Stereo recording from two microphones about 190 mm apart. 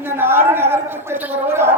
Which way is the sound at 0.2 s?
10° right (ahead or behind).